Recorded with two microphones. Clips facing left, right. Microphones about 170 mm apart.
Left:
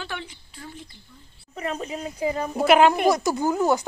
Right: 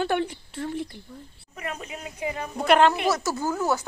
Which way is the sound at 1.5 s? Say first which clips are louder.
Left 5 dB; 30° left (ahead or behind).